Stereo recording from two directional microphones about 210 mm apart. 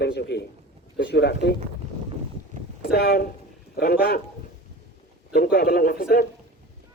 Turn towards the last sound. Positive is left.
turn(degrees=45)  # may be behind; listen again after turning